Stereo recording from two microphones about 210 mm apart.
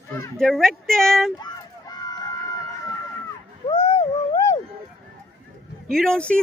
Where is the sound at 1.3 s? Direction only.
20° left (ahead or behind).